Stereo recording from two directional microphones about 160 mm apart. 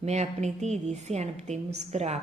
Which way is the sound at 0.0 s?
45° right (ahead or behind).